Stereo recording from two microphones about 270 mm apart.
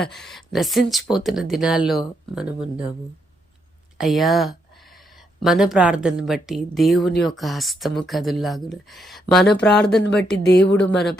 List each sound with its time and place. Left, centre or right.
0.0 s speech: centre
3.9 s speech: centre
10.3 s speech: left
10.8 s speech: centre